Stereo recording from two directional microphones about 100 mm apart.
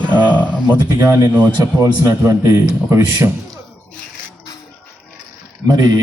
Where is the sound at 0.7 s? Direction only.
35° right (ahead or behind).